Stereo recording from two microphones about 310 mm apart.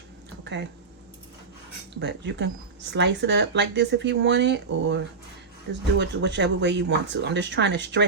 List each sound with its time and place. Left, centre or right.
2.0 s speech: right
6.0 s speech: right